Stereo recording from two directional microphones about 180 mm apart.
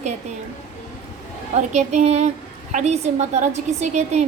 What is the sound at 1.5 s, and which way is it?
A woman's voice, 40° right (ahead or behind).